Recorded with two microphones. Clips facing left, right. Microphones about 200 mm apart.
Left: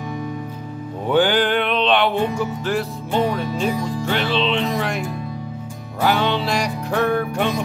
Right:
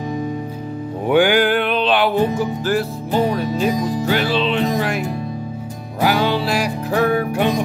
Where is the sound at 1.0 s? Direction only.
15° right (ahead or behind).